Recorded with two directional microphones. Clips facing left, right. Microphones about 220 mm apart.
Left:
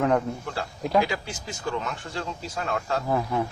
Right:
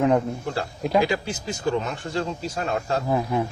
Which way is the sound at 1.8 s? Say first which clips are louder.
Right 5 dB; 35° right (ahead or behind).